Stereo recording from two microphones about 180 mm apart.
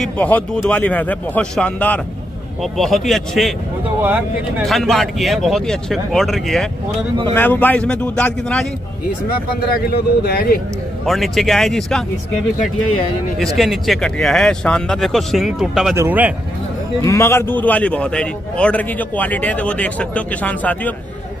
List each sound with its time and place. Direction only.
0.0 s a man's voice: 10° left (ahead or behind)
4.6 s a man's voice: centre (ahead or behind)
9.8 s speech: 60° left (ahead or behind)
11.1 s speech: centre (ahead or behind)
13.6 s a man's voice: centre (ahead or behind)
17.0 s a man's voice: 15° left (ahead or behind)